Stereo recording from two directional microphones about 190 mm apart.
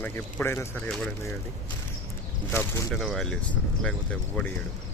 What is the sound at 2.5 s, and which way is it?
Speech, 15° left (ahead or behind).